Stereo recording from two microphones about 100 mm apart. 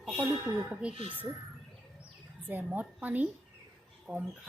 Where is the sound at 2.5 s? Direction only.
20° right (ahead or behind).